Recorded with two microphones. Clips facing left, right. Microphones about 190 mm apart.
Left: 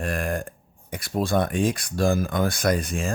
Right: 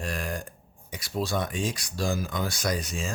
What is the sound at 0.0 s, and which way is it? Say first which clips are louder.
Burping: left 6 dB; 55° left (ahead or behind).